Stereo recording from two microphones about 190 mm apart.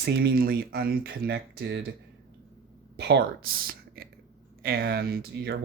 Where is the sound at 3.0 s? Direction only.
60° right (ahead or behind).